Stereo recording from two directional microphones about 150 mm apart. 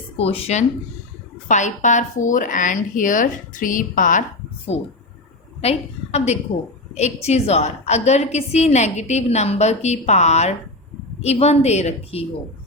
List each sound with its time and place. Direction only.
0.2 s a woman's voice: 40° left (ahead or behind)
1.5 s speech: 55° left (ahead or behind)
5.6 s a woman's voice: 45° left (ahead or behind)